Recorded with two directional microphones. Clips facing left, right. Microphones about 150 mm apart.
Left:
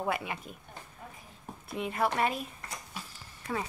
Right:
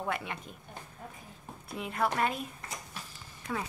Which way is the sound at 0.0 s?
10° left (ahead or behind).